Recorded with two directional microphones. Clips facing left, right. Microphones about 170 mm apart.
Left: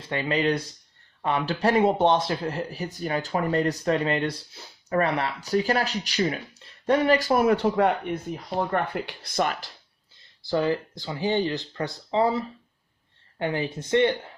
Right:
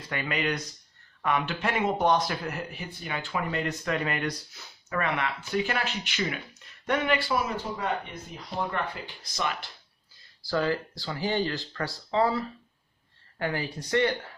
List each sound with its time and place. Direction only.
0.0 s speech: 30° left (ahead or behind); by 9.6 s 45° left (ahead or behind)
10.4 s speech: 20° left (ahead or behind)